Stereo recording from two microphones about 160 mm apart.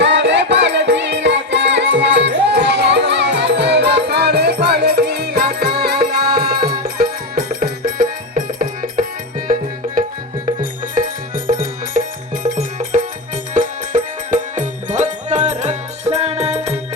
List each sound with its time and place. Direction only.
0.0 s music: 90° right; by 9.0 s 60° right (ahead or behind)
10.6 s music: 60° right (ahead or behind); by 16.7 s 45° right (ahead or behind)